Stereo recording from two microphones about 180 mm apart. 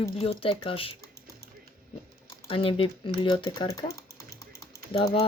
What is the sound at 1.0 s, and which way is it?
Typing, 15° left (ahead or behind).